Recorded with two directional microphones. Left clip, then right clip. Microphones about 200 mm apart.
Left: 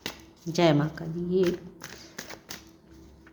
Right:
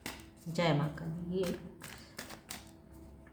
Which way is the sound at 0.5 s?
50° left (ahead or behind).